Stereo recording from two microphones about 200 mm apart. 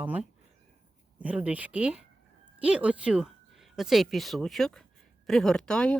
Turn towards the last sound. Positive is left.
turn(degrees=5)  # may be behind; listen again after turning